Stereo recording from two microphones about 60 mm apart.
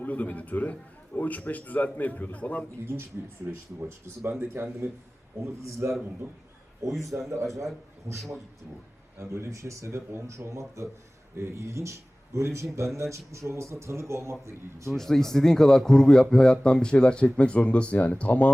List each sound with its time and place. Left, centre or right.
0.0 s a man's voice: left
2.8 s speech: right
5.6 s speech: right
7.3 s speech: right
14.8 s a man's voice: centre